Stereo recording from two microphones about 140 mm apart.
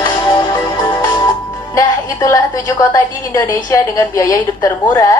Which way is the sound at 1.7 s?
25° left (ahead or behind).